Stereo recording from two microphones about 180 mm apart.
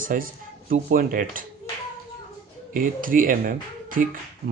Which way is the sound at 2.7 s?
50° right (ahead or behind).